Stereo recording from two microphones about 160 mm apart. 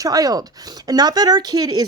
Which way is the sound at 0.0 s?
20° right (ahead or behind).